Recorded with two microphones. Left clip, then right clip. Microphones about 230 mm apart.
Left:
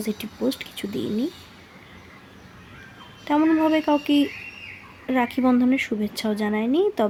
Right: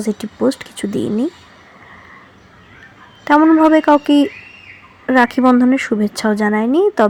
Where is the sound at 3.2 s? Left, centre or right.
Centre.